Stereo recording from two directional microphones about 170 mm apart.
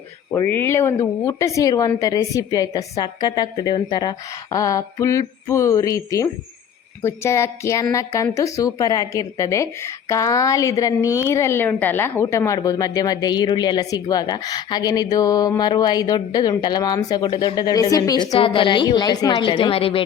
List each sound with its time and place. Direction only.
0.3 s a woman's voice: 15° left (ahead or behind)
18.3 s a woman's voice: 30° left (ahead or behind)